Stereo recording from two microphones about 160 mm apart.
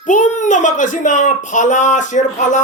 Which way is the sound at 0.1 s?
50° left (ahead or behind).